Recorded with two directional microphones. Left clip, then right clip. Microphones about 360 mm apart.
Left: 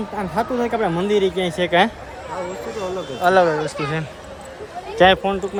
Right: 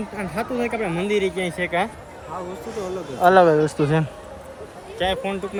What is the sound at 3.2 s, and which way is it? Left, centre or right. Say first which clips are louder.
Speech: right 2 dB; centre.